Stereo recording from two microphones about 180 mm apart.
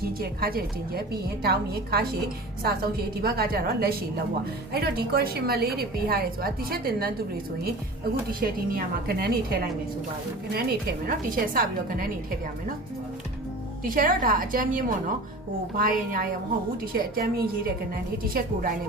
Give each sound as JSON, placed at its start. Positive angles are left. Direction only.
{"t": 0.0, "sound": "a woman's voice", "side_deg": -55}
{"t": 3.2, "sound": "a woman's voice", "side_deg": -60}
{"t": 8.3, "sound": "a woman's voice", "side_deg": -55}
{"t": 13.8, "sound": "a woman's voice", "side_deg": -50}